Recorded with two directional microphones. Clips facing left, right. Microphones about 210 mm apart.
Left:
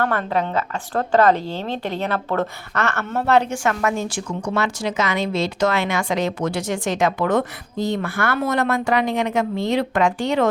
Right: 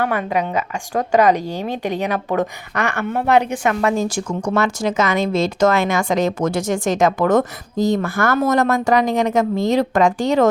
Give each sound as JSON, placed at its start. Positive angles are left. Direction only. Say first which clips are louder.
{"t": 0.0, "sound": "speech", "louder": "right 1 dB", "side_deg": -10}